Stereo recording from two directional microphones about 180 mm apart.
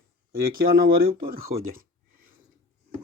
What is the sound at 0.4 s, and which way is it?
Speech, 55° right (ahead or behind).